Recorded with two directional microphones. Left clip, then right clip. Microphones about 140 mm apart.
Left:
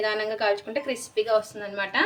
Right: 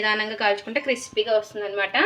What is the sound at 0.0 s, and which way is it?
Speech, 20° right (ahead or behind).